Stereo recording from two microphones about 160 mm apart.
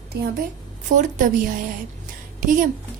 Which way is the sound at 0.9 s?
55° right (ahead or behind).